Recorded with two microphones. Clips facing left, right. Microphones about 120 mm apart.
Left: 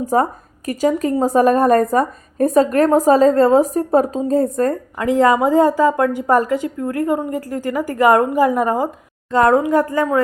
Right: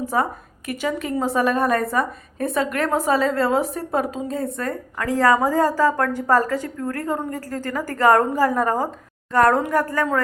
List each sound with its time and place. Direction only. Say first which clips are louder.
0.0 s a woman's voice: left 5 dB; 40° left (ahead or behind)
4.9 s a woman's voice: left 3 dB; 20° left (ahead or behind)